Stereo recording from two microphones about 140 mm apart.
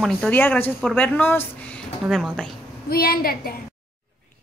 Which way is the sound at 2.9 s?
90° left.